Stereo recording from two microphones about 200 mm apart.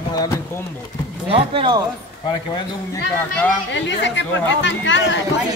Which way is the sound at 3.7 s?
65° left (ahead or behind).